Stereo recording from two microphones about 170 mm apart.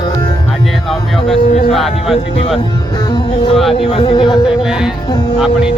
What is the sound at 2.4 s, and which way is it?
Speech, 35° left (ahead or behind).